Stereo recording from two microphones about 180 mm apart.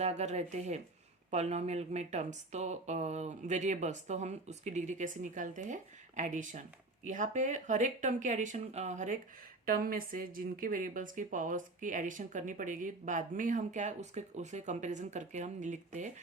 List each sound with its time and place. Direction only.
0.0 s speech: 40° right (ahead or behind)
9.6 s speech: 55° right (ahead or behind)